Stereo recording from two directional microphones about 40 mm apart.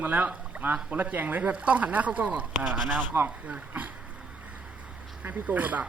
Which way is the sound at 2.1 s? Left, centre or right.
Right.